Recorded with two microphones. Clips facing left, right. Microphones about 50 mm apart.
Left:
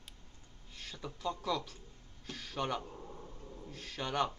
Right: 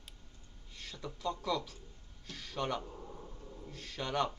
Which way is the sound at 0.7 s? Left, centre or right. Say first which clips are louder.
Even; centre.